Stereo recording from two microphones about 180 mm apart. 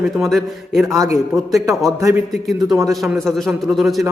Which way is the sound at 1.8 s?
20° right (ahead or behind).